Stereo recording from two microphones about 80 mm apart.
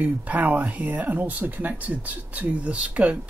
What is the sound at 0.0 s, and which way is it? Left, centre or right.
Speech, centre.